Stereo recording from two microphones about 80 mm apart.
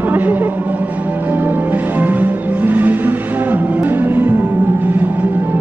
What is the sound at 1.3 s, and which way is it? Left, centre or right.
Music, right.